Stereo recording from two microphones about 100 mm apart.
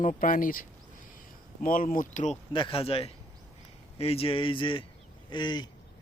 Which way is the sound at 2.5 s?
60° left (ahead or behind).